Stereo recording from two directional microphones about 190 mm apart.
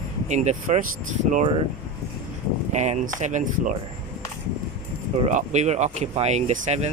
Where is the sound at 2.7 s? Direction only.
40° right (ahead or behind).